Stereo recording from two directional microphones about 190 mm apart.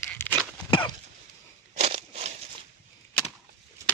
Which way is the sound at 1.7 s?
35° right (ahead or behind).